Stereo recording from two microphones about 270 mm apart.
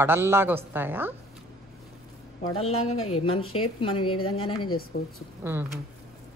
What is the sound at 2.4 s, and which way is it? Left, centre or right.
Speech, left.